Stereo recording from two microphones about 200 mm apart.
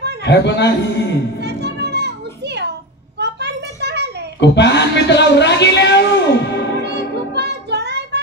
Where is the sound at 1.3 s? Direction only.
55° right (ahead or behind).